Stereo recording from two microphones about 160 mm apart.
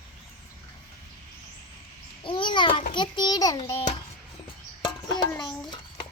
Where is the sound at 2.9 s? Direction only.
30° left (ahead or behind).